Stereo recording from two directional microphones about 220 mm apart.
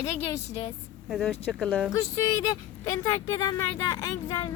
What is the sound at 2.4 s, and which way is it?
Speech, 15° left (ahead or behind).